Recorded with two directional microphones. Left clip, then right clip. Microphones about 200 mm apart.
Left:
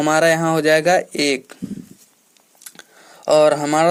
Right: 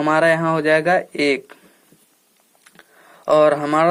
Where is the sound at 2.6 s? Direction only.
30° left (ahead or behind).